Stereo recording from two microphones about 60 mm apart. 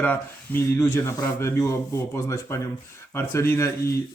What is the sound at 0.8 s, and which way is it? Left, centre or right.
Speech, left.